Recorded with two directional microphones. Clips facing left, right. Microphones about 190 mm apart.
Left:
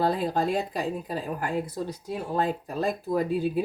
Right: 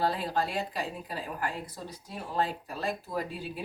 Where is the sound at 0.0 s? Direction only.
45° left (ahead or behind).